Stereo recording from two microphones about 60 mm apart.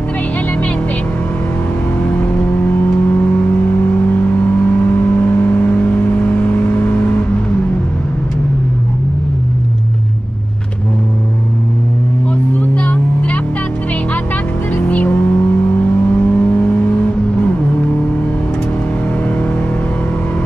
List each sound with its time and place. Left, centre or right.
2.1 s vehicle: left
12.5 s vehicle: left
14.8 s vehicle: left